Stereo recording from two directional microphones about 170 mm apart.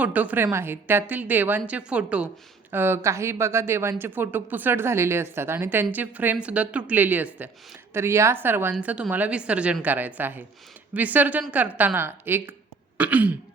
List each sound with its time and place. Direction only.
0.0 s a woman's voice: 10° right (ahead or behind)